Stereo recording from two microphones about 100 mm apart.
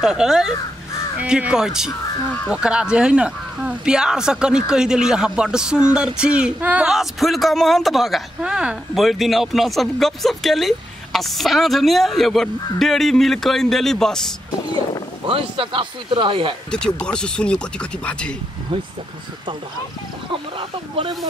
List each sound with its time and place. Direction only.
0.0 s speech: 5° right (ahead or behind)
6.9 s speech: centre (ahead or behind)
15.2 s speech: 65° right (ahead or behind)
16.7 s speech: 10° left (ahead or behind)
20.2 s speech: 60° right (ahead or behind)